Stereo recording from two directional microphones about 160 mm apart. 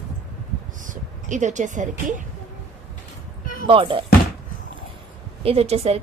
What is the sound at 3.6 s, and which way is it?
Speech, 35° right (ahead or behind).